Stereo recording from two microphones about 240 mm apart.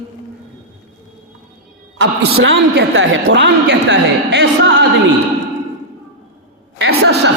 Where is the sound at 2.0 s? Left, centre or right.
Right.